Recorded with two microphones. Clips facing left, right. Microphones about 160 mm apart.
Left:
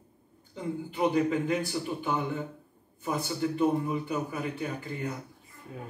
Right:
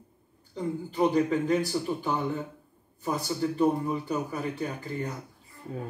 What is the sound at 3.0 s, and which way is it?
A man's voice, 35° right (ahead or behind).